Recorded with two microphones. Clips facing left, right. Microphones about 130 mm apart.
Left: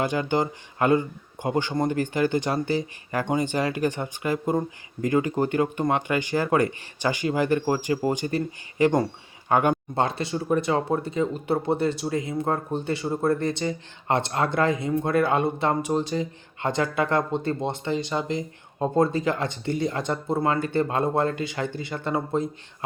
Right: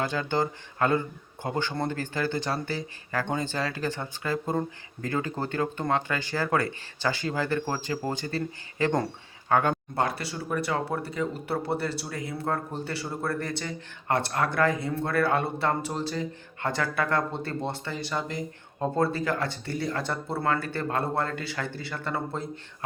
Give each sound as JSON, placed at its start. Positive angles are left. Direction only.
{"t": 0.0, "sound": "speech", "side_deg": 15}